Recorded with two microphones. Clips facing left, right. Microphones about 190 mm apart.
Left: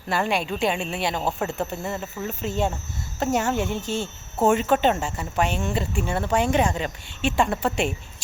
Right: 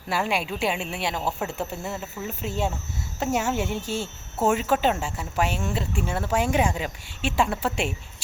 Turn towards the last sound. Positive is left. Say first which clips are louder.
# left 3 dB
turn(degrees=-5)  # may be behind; listen again after turning